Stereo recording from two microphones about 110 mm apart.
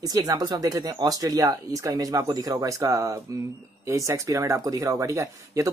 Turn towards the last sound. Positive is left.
turn(degrees=-30)  # may be behind; listen again after turning